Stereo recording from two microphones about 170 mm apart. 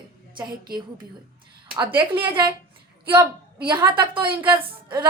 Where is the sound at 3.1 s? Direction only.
30° right (ahead or behind).